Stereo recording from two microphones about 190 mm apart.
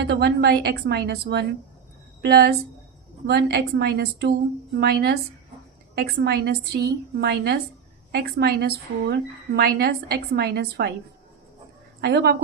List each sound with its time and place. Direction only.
0.1 s a woman's voice: 55° right (ahead or behind)
11.9 s a woman's voice: 60° right (ahead or behind)